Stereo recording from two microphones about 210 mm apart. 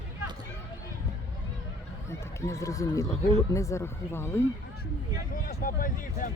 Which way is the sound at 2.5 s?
15° left (ahead or behind).